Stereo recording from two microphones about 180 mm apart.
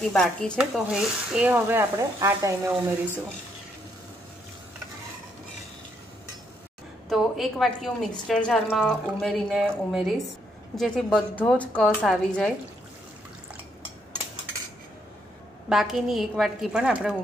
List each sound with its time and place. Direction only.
0.1 s a woman's voice: 5° left (ahead or behind); by 2.9 s 15° right (ahead or behind)
7.1 s a woman's voice: centre (ahead or behind)
15.7 s a woman's voice: centre (ahead or behind)